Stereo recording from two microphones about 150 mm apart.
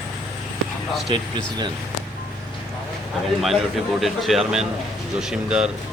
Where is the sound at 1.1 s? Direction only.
30° right (ahead or behind).